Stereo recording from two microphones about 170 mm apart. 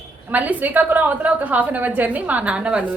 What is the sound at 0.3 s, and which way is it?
A woman's voice, 10° right (ahead or behind).